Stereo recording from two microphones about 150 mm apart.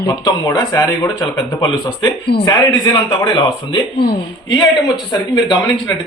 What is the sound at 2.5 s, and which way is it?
Speech, 30° left (ahead or behind).